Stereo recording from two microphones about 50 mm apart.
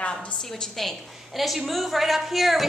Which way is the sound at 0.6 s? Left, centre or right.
Centre.